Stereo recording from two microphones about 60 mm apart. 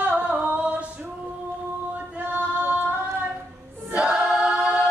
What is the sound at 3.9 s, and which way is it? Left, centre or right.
Choir, centre.